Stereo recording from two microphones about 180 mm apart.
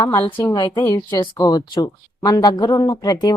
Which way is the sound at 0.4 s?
25° left (ahead or behind).